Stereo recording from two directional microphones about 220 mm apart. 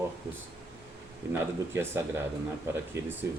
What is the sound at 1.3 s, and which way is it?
Speech, 10° right (ahead or behind).